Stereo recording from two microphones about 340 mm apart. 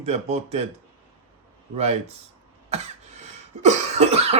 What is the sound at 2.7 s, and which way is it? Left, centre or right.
Cough, centre.